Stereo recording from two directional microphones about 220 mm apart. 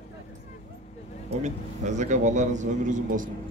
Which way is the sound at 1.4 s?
35° right (ahead or behind).